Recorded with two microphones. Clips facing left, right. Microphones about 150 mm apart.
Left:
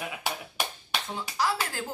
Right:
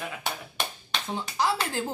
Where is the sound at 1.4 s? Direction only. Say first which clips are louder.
Right 2 dB; 25° right (ahead or behind).